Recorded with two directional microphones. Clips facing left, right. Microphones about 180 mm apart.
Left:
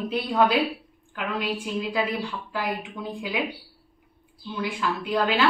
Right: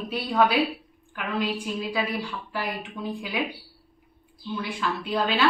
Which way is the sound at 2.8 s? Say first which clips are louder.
Even; 20° left (ahead or behind).